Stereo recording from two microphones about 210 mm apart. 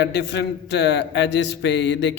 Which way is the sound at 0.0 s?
55° left (ahead or behind).